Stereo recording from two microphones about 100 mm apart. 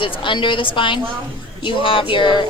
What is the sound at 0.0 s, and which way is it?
A woman's voice, 55° left (ahead or behind).